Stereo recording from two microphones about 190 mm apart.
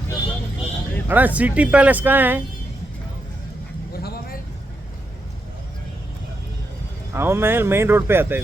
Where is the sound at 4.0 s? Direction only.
55° left (ahead or behind).